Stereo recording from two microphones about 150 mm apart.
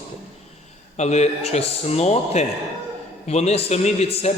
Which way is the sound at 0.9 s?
50° left (ahead or behind).